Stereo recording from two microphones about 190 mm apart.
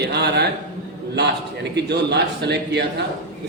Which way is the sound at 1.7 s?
60° right (ahead or behind).